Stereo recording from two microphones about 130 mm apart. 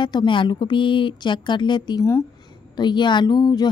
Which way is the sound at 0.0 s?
35° left (ahead or behind).